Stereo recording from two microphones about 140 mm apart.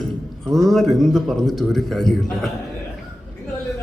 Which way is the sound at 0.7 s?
Centre (ahead or behind).